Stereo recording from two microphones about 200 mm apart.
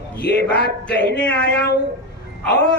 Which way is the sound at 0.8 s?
5° left (ahead or behind).